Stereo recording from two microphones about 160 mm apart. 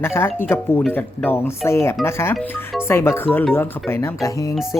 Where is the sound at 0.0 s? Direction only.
15° left (ahead or behind).